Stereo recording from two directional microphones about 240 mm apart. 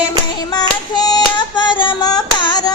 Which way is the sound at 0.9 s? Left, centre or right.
Centre.